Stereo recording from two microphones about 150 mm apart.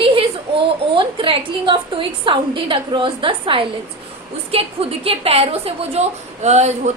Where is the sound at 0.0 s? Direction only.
40° right (ahead or behind).